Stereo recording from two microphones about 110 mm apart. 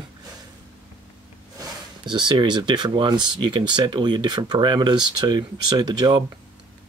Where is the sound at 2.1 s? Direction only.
45° right (ahead or behind).